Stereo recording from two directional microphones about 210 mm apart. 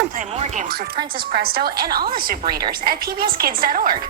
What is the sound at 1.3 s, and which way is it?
Speech, 45° right (ahead or behind).